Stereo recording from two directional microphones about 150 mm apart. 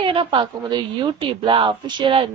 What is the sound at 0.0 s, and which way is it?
A woman's voice, 35° right (ahead or behind).